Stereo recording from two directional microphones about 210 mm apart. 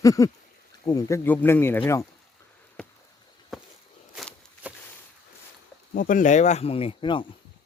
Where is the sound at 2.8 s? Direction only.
5° left (ahead or behind).